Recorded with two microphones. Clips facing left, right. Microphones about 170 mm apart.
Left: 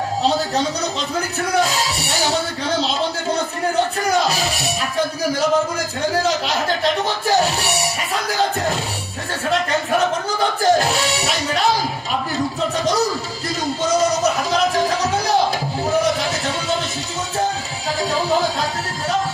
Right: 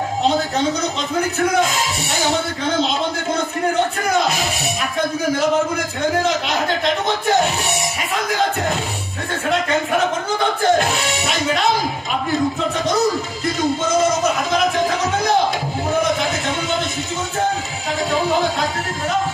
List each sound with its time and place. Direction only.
1.6 s music: 35° left (ahead or behind)
7.3 s music: 35° left (ahead or behind)
10.6 s music: 35° left (ahead or behind)
14.5 s music: 35° left (ahead or behind)